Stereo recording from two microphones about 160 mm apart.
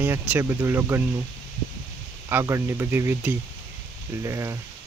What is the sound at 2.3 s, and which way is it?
Speech, 15° right (ahead or behind).